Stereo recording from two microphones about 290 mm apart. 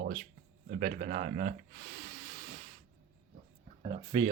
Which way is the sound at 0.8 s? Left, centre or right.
Right.